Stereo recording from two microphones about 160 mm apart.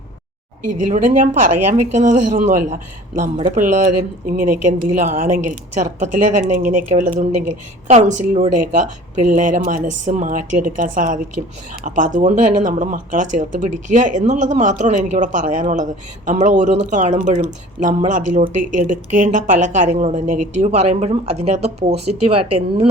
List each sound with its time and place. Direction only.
0.9 s a woman's voice: 50° right (ahead or behind)